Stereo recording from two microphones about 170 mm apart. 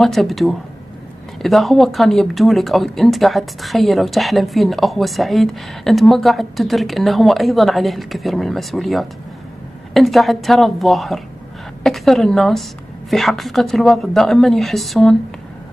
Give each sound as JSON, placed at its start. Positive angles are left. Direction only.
{"t": 0.0, "sound": "speech", "side_deg": 0}